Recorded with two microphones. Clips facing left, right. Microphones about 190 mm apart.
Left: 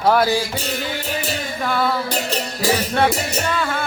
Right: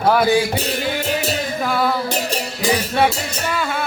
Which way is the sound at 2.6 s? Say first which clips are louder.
Right 1 dB; 10° right (ahead or behind).